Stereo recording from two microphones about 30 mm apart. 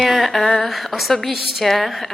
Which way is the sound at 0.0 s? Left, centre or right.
Centre.